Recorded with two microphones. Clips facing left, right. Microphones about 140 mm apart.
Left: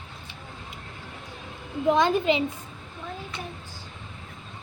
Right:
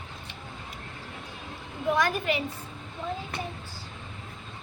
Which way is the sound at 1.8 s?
20° left (ahead or behind).